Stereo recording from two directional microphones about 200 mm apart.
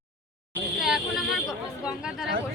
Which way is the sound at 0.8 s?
Centre (ahead or behind).